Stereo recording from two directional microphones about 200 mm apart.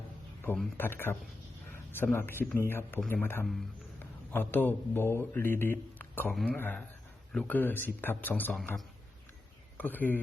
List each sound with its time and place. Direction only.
0.5 s a man's voice: 5° left (ahead or behind)